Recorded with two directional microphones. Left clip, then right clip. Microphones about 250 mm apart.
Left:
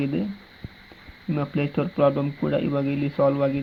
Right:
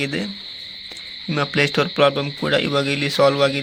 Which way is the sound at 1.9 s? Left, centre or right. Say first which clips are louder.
Right 4 dB; right.